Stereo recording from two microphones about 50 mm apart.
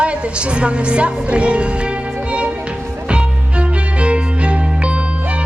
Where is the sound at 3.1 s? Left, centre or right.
Right.